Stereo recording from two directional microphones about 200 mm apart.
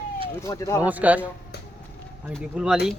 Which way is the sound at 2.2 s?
5° right (ahead or behind).